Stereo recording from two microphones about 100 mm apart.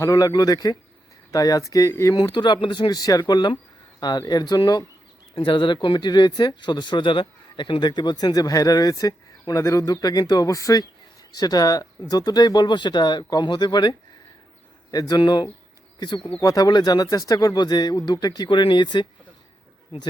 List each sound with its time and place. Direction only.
0.0 s speech: 35° left (ahead or behind)
2.1 s speech: 45° left (ahead or behind)
5.3 s speech: 60° left (ahead or behind)
16.4 s speech: 40° left (ahead or behind)